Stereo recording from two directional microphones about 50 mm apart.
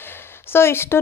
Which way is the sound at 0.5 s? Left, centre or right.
Left.